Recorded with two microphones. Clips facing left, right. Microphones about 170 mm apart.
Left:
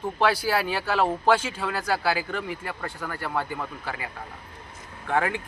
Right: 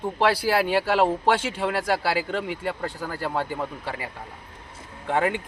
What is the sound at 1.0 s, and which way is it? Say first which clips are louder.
Speech: right 1 dB; 25° right (ahead or behind).